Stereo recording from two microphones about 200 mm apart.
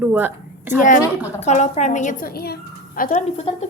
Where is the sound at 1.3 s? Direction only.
35° left (ahead or behind).